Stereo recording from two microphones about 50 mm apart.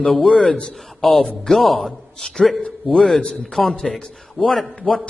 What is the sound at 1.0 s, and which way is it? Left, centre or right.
A man's voice, centre.